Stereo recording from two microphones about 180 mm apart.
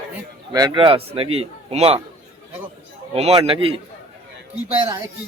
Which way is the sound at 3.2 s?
30° right (ahead or behind).